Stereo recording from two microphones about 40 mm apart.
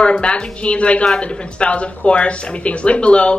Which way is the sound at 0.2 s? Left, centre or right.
Left.